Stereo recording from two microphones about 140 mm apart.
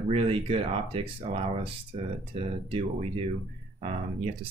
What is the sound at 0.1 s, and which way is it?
Speech, 40° right (ahead or behind).